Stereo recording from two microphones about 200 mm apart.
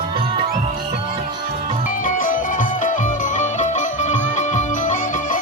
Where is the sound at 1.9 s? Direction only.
40° left (ahead or behind).